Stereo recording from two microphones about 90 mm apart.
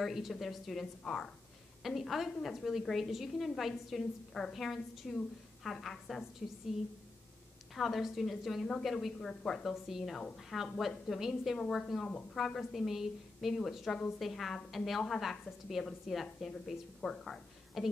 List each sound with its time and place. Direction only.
0.0 s a woman's voice: centre (ahead or behind)
7.7 s a woman's voice: centre (ahead or behind)